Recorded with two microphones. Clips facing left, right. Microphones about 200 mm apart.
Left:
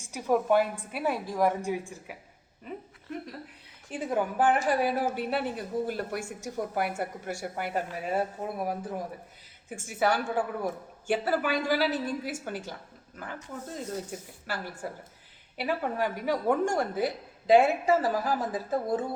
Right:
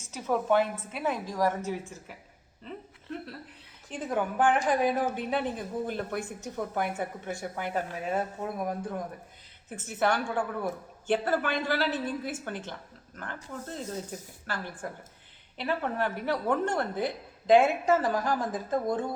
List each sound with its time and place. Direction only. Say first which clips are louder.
0.0 s a woman's voice: left 3 dB; 15° left (ahead or behind)
3.8 s a woman's voice: left 1 dB; 5° left (ahead or behind)